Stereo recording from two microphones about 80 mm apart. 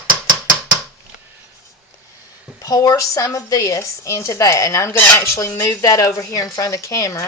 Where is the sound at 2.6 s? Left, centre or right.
Left.